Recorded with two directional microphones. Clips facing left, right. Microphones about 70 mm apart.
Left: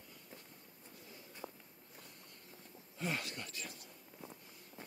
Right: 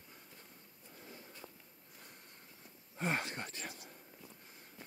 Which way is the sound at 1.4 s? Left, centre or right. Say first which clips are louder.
Left 5 dB; left.